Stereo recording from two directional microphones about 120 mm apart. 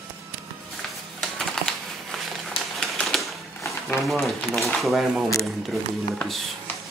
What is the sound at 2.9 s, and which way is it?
Typewriter, centre (ahead or behind).